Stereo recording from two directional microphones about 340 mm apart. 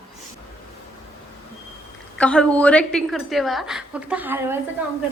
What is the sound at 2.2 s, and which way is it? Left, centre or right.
A woman's voice, centre.